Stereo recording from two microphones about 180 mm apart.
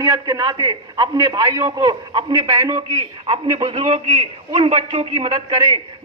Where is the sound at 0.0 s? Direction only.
20° right (ahead or behind).